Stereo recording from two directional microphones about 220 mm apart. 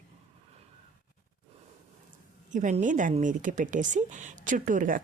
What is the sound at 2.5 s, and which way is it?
Speech, 35° right (ahead or behind).